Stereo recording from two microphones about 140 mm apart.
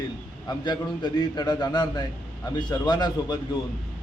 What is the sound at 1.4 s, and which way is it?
Speech, 30° left (ahead or behind).